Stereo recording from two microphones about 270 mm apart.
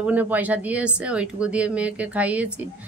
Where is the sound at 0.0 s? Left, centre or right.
Centre.